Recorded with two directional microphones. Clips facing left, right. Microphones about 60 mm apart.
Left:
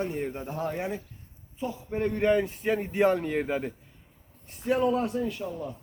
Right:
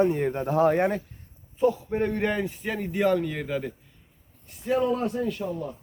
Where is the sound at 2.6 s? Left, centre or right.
Centre.